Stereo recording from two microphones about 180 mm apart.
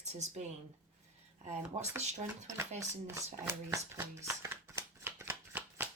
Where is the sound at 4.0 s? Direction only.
15° right (ahead or behind).